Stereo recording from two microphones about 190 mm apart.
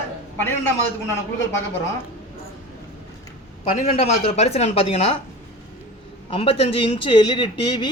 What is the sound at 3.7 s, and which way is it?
A woman's voice, 35° left (ahead or behind).